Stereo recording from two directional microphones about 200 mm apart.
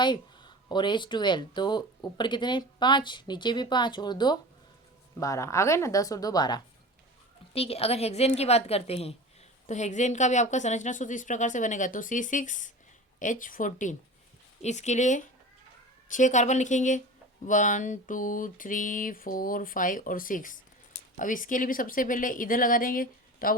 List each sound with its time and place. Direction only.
0.0 s a woman's voice: 20° left (ahead or behind)
7.5 s a sound: 30° left (ahead or behind)
21.2 s speech: 40° left (ahead or behind)